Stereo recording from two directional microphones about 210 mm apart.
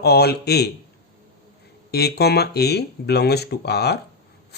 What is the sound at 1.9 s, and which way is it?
Speech, 50° left (ahead or behind).